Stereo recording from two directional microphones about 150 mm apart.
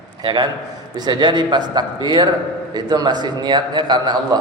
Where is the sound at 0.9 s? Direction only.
30° right (ahead or behind).